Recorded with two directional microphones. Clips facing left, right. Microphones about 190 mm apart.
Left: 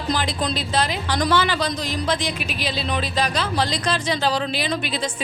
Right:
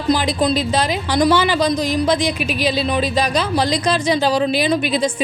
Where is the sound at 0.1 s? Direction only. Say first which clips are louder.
Right 8 dB; 10° right (ahead or behind).